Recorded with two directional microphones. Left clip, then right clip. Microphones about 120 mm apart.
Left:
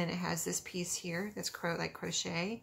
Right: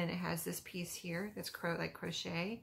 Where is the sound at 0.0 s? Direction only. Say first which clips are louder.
Left 3 dB; 30° left (ahead or behind).